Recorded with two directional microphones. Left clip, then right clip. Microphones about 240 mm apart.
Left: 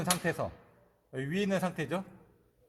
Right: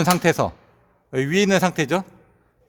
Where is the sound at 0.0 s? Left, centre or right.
Right.